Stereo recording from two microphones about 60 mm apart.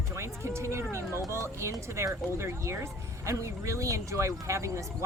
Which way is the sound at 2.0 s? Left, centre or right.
Right.